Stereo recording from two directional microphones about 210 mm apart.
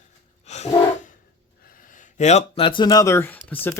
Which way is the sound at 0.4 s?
30° left (ahead or behind).